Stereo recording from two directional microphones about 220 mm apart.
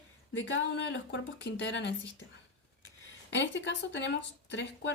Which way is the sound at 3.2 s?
55° left (ahead or behind).